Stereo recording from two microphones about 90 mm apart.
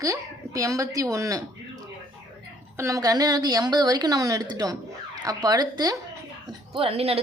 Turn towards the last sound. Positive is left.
turn(degrees=-90)